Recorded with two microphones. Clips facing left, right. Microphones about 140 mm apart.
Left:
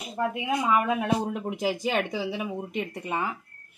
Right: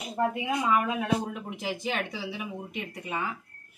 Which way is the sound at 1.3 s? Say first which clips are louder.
Left 6 dB; 40° left (ahead or behind).